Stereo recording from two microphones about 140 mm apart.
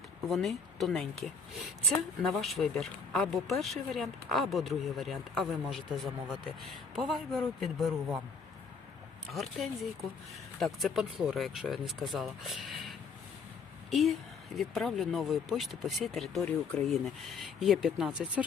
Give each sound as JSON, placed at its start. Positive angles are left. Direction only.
{"t": 0.3, "sound": "speech", "side_deg": 0}
{"t": 9.3, "sound": "speech", "side_deg": 0}
{"t": 13.9, "sound": "speech", "side_deg": 0}